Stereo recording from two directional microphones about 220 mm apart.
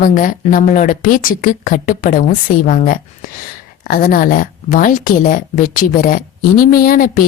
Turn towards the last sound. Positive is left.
turn(degrees=40)  # may be behind; listen again after turning